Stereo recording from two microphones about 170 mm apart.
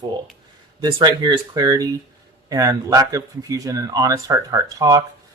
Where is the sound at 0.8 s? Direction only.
25° right (ahead or behind).